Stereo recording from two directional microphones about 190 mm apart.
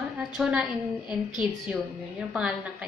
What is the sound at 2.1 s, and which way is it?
Speech, centre (ahead or behind).